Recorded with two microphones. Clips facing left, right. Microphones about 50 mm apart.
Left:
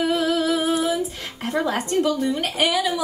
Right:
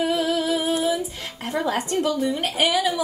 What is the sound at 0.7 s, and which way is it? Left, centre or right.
Music, centre.